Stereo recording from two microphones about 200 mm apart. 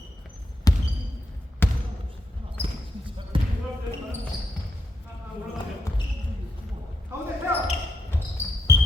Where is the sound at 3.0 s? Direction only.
25° right (ahead or behind).